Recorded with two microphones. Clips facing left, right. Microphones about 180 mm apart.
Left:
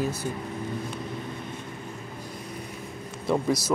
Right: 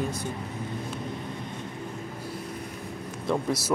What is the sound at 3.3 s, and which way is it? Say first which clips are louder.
Speech: left 2 dB; 5° left (ahead or behind).